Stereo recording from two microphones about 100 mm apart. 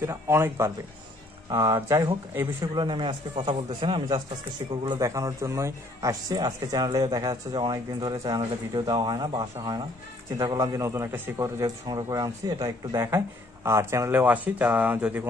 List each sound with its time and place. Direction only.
0.0 s a man's voice: 25° right (ahead or behind)
2.7 s a man's voice: 50° right (ahead or behind)
4.8 s a man's voice: 35° right (ahead or behind)
11.6 s a man's voice: 40° right (ahead or behind)
13.7 s a man's voice: 25° right (ahead or behind)
14.2 s speech: 15° right (ahead or behind)